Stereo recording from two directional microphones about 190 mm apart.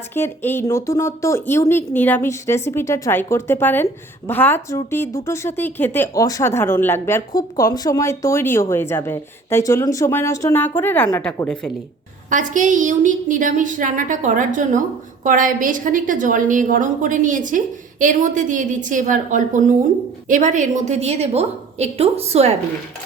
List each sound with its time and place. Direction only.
0.1 s speech: 10° left (ahead or behind)
12.3 s a woman's voice: 40° right (ahead or behind)